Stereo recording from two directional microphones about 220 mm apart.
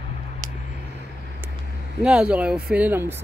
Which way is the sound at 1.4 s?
10° right (ahead or behind).